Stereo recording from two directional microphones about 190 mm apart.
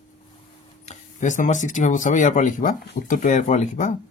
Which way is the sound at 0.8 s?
40° left (ahead or behind).